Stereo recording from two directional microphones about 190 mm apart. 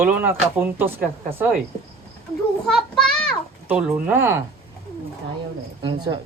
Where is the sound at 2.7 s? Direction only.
Centre (ahead or behind).